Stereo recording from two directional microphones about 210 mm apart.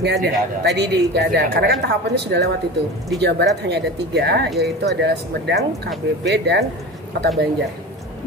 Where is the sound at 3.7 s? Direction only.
50° right (ahead or behind).